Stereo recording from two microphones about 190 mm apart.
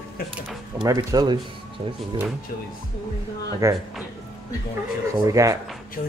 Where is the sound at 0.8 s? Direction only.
20° right (ahead or behind).